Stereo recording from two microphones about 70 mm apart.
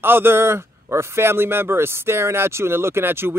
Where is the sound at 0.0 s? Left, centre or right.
Right.